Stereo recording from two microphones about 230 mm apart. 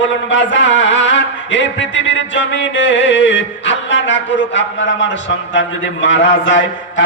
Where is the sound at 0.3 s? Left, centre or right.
Left.